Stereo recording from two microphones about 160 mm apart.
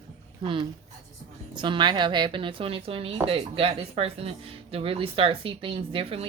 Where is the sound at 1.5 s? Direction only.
30° right (ahead or behind).